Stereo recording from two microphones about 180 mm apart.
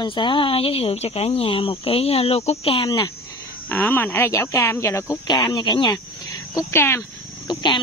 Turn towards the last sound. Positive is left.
turn(degrees=25)  # may be behind; listen again after turning